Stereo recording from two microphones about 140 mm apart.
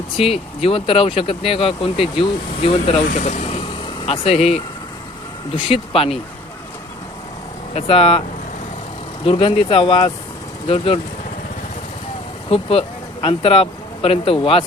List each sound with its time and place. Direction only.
0.2 s speech: 45° left (ahead or behind)
3.1 s speech: 55° left (ahead or behind)
7.8 s speech: 45° left (ahead or behind)
9.2 s speech: 40° left (ahead or behind)
12.5 s speech: 40° left (ahead or behind)